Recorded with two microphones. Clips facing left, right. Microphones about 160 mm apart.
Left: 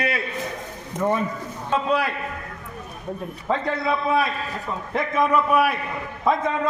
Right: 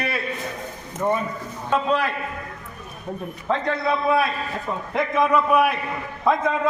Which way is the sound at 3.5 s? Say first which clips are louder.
Right 1 dB; 5° left (ahead or behind).